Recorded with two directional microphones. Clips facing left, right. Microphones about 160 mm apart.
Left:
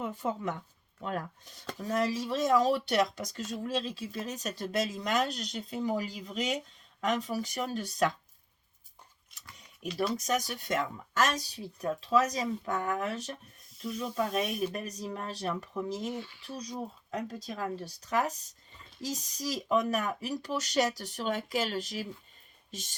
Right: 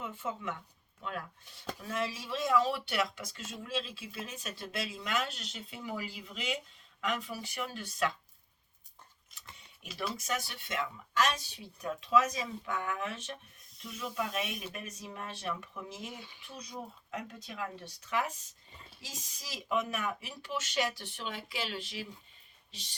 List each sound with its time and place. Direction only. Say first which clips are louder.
0.0 s speech: left 5 dB; 40° left (ahead or behind)
9.9 s speech: left 7 dB; 5° right (ahead or behind)
10.2 s speech: left 6 dB; 40° left (ahead or behind)
16.1 s speech: left 9 dB; 15° right (ahead or behind)
16.4 s speech: left 6 dB; 35° left (ahead or behind)